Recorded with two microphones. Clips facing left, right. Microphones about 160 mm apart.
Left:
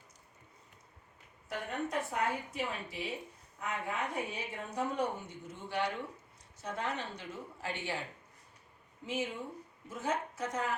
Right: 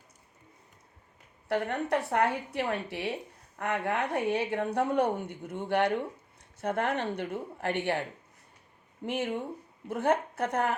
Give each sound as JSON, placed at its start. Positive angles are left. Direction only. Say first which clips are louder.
{"t": 1.5, "sound": "a woman's voice", "louder": "right 9 dB", "side_deg": -70}
{"t": 9.0, "sound": "a woman's voice", "louder": "right 6 dB", "side_deg": -65}